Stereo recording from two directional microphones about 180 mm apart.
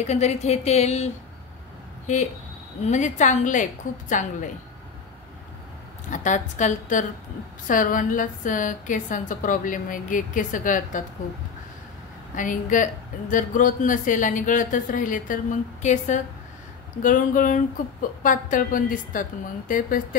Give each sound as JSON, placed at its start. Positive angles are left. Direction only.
{"t": 0.0, "sound": "speech", "side_deg": 40}
{"t": 2.8, "sound": "speech", "side_deg": 40}
{"t": 6.0, "sound": "speech", "side_deg": 45}
{"t": 12.4, "sound": "speech", "side_deg": 45}